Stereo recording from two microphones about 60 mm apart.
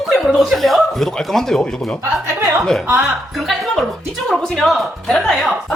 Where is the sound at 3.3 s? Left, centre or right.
Centre.